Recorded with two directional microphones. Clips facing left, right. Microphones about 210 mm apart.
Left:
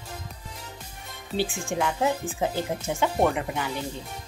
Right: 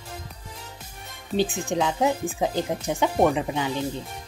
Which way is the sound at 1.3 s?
20° right (ahead or behind).